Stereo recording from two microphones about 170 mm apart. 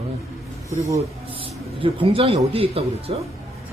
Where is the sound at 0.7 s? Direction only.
20° right (ahead or behind).